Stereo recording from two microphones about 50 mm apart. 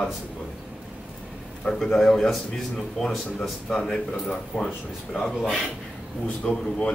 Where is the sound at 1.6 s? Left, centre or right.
Centre.